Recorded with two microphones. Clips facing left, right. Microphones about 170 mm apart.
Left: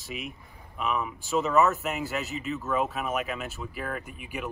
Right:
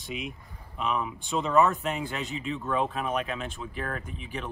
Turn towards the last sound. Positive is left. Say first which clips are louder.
# even
turn(degrees=10)  # may be behind; listen again after turning